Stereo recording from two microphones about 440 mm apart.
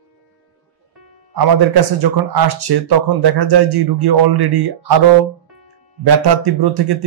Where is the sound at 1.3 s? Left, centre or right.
Right.